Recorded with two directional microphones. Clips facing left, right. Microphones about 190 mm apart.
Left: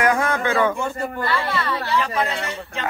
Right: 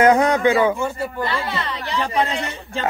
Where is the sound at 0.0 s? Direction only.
20° right (ahead or behind).